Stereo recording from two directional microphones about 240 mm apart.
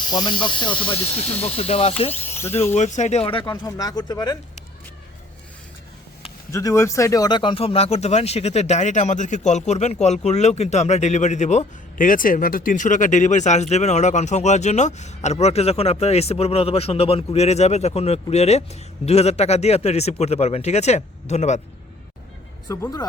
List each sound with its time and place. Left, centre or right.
0.1 s speech: centre
2.3 s speech: centre
2.7 s speech: left
6.5 s speech: centre; by 21.6 s left
22.7 s speech: centre